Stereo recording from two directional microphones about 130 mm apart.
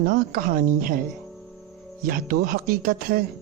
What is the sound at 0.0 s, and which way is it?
Speech, 90° right.